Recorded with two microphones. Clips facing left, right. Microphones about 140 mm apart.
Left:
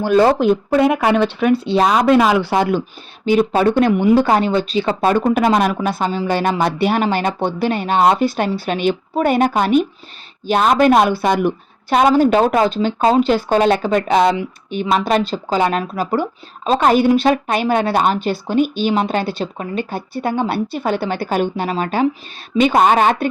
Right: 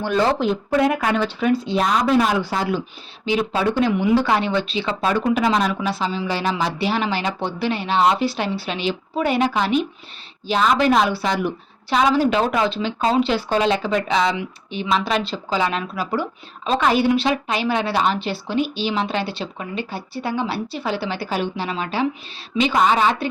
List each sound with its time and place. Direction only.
0.0 s speech: 45° left (ahead or behind)